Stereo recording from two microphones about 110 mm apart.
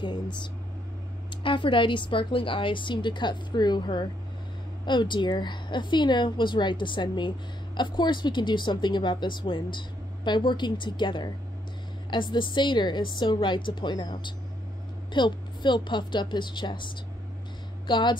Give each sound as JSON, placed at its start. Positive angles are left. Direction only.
{"t": 1.4, "sound": "a woman's voice", "side_deg": 50}